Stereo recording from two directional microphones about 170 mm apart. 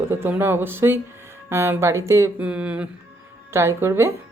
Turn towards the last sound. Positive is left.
turn(degrees=-15)  # may be behind; listen again after turning